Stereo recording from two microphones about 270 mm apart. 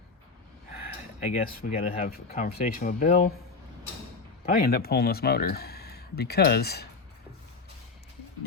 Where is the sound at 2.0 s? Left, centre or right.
Left.